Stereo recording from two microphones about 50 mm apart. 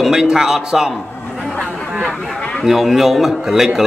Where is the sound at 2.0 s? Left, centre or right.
Centre.